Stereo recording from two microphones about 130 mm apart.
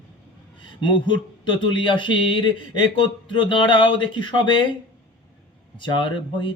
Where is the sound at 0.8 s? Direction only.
35° left (ahead or behind).